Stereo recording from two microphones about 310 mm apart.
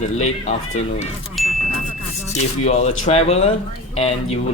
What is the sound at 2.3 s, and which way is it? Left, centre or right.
A man's voice, left.